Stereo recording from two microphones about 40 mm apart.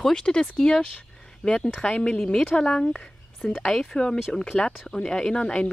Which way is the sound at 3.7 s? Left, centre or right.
Centre.